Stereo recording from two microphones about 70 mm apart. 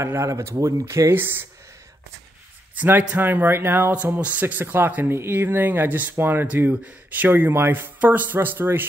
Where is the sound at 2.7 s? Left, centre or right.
Right.